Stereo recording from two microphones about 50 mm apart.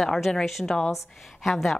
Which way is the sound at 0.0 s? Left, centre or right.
Centre.